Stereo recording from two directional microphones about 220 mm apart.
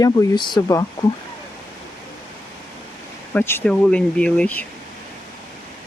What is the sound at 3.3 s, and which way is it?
Speech, 10° left (ahead or behind).